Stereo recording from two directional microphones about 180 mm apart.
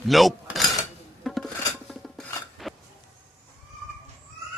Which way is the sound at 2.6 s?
Centre (ahead or behind).